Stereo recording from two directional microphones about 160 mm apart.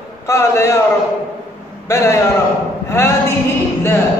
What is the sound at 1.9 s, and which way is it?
A man's voice, 20° left (ahead or behind).